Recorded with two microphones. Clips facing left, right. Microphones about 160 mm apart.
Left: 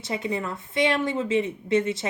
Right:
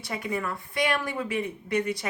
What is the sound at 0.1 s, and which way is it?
A woman's voice, 25° left (ahead or behind).